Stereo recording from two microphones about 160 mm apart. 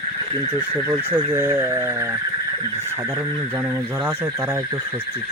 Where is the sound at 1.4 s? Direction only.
15° right (ahead or behind).